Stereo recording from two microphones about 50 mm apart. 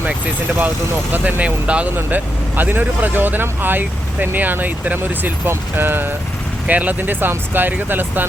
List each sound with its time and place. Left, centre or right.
1.1 s speech: right
2.0 s speech: right
5.5 s speech: right
6.7 s speech: right